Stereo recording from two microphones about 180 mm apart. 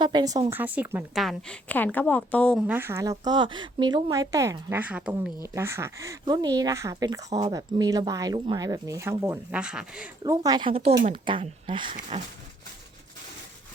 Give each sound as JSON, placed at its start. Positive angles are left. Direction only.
{"t": 0.0, "sound": "a woman's voice", "side_deg": -25}
{"t": 2.6, "sound": "speech", "side_deg": -10}
{"t": 10.2, "sound": "speech", "side_deg": -20}